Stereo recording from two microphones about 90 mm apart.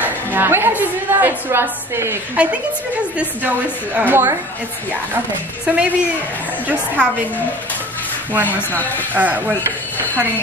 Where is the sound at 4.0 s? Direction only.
25° right (ahead or behind).